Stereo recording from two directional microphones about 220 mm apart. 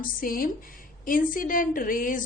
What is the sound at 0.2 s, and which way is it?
A woman's voice, 40° left (ahead or behind).